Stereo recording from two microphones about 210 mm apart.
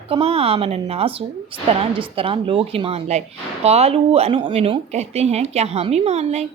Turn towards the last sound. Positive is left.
turn(degrees=-30)  # may be behind; listen again after turning